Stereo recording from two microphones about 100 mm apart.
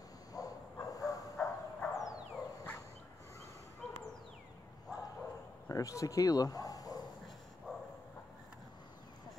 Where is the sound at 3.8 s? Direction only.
5° left (ahead or behind).